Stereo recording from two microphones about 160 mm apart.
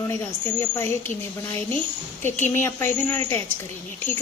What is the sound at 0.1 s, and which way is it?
A woman's voice, 15° left (ahead or behind).